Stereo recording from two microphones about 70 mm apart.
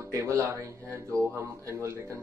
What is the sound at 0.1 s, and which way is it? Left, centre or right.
Speech, right.